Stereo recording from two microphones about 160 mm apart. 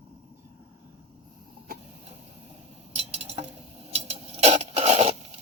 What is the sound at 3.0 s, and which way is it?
Stir, 40° right (ahead or behind).